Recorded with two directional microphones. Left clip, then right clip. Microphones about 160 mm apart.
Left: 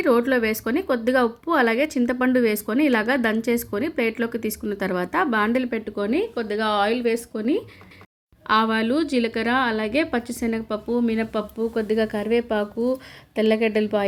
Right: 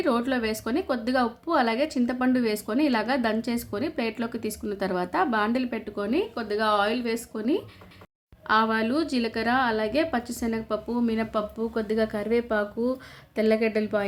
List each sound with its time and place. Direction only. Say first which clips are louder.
0.0 s a woman's voice: left 6 dB; 15° left (ahead or behind)